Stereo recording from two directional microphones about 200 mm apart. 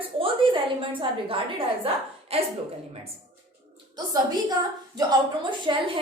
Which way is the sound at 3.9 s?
20° right (ahead or behind).